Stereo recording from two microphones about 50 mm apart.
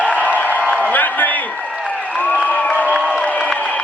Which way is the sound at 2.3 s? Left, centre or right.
Left.